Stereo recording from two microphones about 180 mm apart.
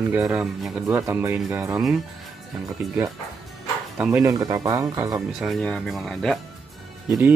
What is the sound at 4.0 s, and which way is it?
Speech, 10° right (ahead or behind).